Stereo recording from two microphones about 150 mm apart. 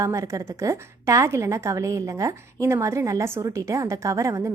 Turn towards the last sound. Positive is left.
turn(degrees=-20)  # may be behind; listen again after turning